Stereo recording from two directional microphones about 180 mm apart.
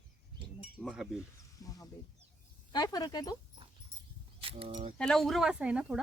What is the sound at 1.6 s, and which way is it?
Speech, 20° left (ahead or behind).